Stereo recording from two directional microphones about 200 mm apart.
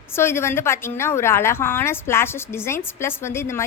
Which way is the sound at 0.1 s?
10° left (ahead or behind).